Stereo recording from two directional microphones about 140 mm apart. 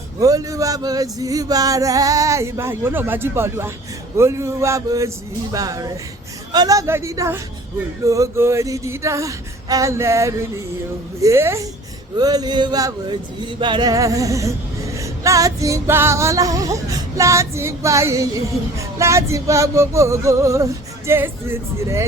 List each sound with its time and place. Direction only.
0.2 s male singing: 25° right (ahead or behind)
21.1 s speech: 15° right (ahead or behind)